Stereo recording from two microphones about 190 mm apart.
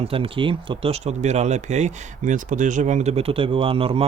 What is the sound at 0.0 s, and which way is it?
Speech, 30° right (ahead or behind).